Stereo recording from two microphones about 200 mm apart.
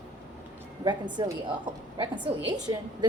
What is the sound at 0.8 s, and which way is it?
A woman's voice, 20° right (ahead or behind).